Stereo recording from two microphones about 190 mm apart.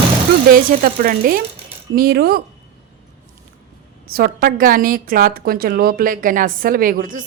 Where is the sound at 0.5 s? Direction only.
50° right (ahead or behind).